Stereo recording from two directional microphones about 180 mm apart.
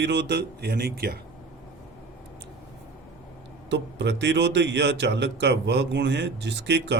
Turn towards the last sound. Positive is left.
turn(degrees=-75)  # may be behind; listen again after turning